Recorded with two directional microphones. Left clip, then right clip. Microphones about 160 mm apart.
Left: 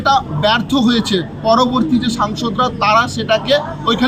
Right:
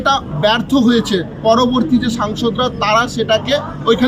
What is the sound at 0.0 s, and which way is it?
A man's voice, centre (ahead or behind).